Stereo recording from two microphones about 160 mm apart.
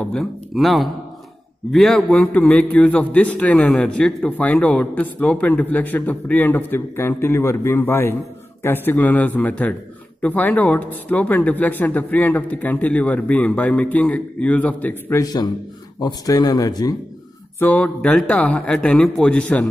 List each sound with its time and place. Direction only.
0.0 s a man's voice: 5° left (ahead or behind)
15.2 s speech: 25° left (ahead or behind)
17.6 s a man's voice: 10° left (ahead or behind)